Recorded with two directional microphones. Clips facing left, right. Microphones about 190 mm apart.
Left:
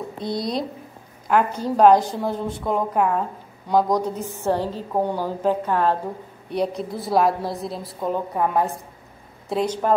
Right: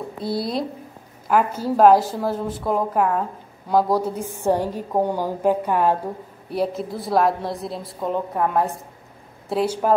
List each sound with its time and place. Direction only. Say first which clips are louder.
0.2 s a woman's voice: right 1 dB; 5° right (ahead or behind)